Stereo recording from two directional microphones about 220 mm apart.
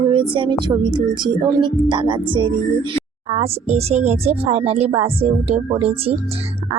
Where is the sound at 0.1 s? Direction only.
20° right (ahead or behind).